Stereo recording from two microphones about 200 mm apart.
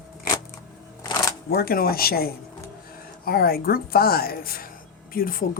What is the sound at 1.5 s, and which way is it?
A woman's voice, 50° left (ahead or behind).